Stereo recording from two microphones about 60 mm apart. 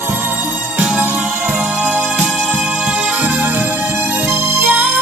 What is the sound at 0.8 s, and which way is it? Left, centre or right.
Music, centre.